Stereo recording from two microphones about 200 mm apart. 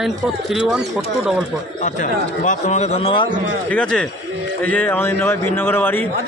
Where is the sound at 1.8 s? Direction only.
40° left (ahead or behind).